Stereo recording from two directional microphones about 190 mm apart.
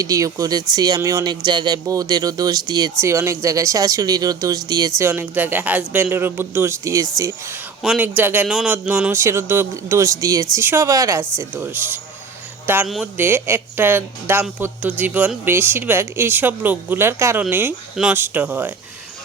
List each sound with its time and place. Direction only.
0.0 s speech: 15° right (ahead or behind)
7.8 s a man's voice: 5° right (ahead or behind)